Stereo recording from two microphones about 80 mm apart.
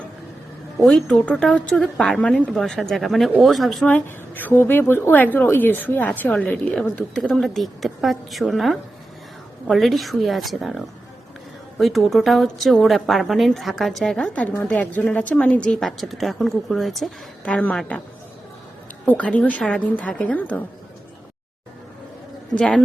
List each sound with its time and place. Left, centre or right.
0.8 s a woman's voice: centre
1.8 s a woman's voice: centre
3.8 s a woman's voice: centre
7.1 s a woman's voice: centre
14.3 s a woman's voice: centre
15.8 s a woman's voice: centre
17.4 s a woman's voice: centre
19.0 s a woman's voice: centre
22.5 s a woman's voice: centre